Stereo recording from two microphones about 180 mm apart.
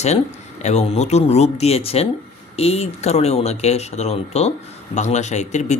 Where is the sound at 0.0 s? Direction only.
40° left (ahead or behind).